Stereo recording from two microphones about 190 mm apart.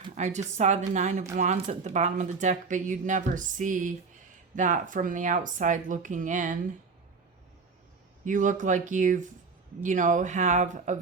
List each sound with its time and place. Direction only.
0.2 s speech: 40° right (ahead or behind)
8.2 s speech: 40° right (ahead or behind)